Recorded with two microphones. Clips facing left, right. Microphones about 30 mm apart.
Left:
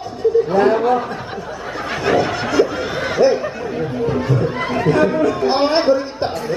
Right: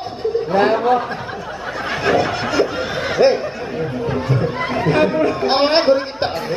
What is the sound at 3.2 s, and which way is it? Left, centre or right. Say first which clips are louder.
Speech: even; right.